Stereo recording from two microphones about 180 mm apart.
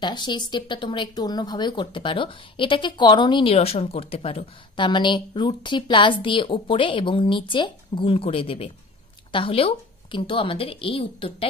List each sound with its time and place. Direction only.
0.0 s speech: 25° left (ahead or behind)